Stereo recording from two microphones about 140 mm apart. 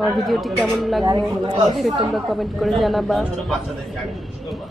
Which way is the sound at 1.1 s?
35° right (ahead or behind).